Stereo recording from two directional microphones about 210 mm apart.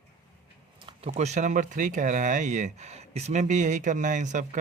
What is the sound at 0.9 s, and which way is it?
Speech, 30° right (ahead or behind).